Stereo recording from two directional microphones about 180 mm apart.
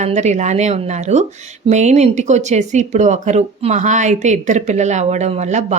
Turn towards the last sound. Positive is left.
turn(degrees=-40)  # may be behind; listen again after turning